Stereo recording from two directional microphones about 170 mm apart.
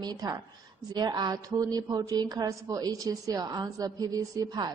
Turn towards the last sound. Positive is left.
turn(degrees=-20)  # may be behind; listen again after turning